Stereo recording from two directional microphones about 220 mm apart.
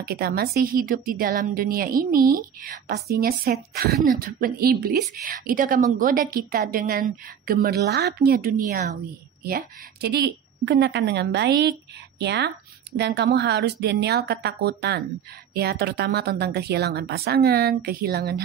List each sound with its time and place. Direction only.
0.0 s a woman's voice: 45° right (ahead or behind)